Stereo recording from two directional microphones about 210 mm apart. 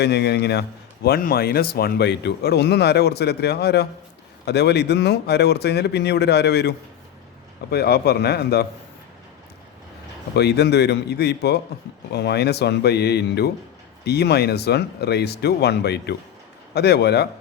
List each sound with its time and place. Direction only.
0.0 s speech: 50° left (ahead or behind)
10.3 s speech: 50° left (ahead or behind)